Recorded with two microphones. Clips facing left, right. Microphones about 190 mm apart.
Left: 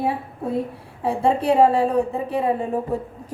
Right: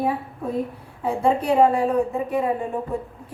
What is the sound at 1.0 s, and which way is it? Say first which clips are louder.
A woman's voice: left 1 dB; 30° left (ahead or behind).